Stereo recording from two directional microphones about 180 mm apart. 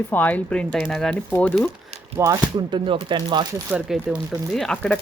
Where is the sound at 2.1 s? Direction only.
15° right (ahead or behind).